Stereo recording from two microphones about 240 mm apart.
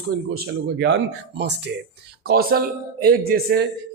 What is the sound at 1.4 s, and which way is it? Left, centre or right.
Speech, right.